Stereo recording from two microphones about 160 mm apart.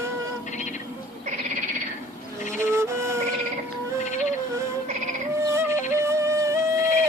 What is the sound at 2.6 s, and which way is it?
Music, 15° right (ahead or behind).